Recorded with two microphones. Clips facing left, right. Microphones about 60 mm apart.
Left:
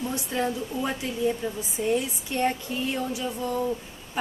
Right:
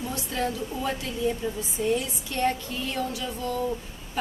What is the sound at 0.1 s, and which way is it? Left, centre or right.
Speech, left.